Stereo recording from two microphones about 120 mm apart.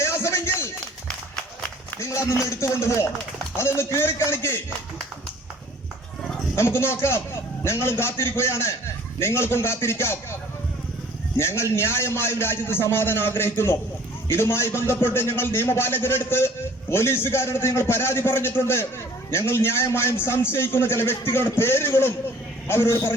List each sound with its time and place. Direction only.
0.0 s a sound: 20° left (ahead or behind)
1.9 s a man's voice: 20° left (ahead or behind)
6.6 s a man's voice: 20° left (ahead or behind)
11.3 s a man's voice: 20° left (ahead or behind)